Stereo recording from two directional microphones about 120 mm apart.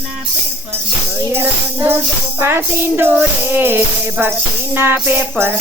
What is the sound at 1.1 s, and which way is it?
Speech, 15° right (ahead or behind).